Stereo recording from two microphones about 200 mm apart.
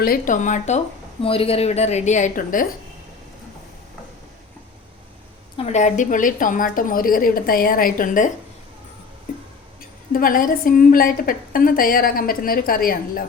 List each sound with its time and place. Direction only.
0.0 s a woman's voice: 45° left (ahead or behind)
5.5 s a woman's voice: 35° left (ahead or behind)
10.1 s a woman's voice: 45° left (ahead or behind)